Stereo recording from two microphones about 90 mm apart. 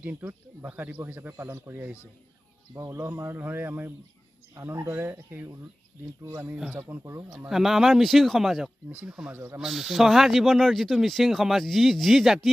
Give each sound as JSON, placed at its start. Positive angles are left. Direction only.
{"t": 0.0, "sound": "speech", "side_deg": -20}
{"t": 2.7, "sound": "speech", "side_deg": -35}
{"t": 6.5, "sound": "speech", "side_deg": -15}
{"t": 7.1, "sound": "speech", "side_deg": -35}
{"t": 7.3, "sound": "speech", "side_deg": -5}
{"t": 9.6, "sound": "speech", "side_deg": 0}